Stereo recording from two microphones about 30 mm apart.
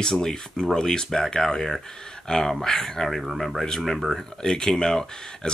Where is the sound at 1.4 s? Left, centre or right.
Centre.